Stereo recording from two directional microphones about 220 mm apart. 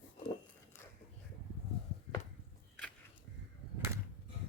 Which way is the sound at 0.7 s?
10° left (ahead or behind).